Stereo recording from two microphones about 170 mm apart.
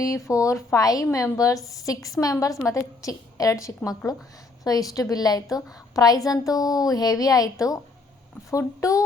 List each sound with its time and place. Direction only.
0.0 s a woman's voice: 20° left (ahead or behind)